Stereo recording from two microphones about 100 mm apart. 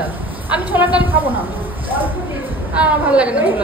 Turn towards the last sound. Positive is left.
turn(degrees=-15)  # may be behind; listen again after turning